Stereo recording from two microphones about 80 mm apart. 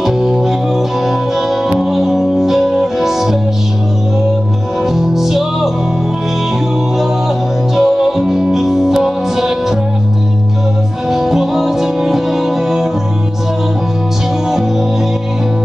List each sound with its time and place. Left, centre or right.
0.0 s music: centre
1.7 s music: centre
4.8 s music: centre
7.7 s music: centre
11.1 s music: centre